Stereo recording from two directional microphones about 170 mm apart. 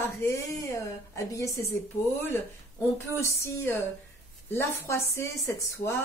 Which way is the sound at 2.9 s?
15° left (ahead or behind).